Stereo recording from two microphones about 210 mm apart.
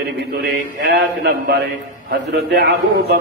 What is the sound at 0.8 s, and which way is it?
A man's voice, 50° right (ahead or behind).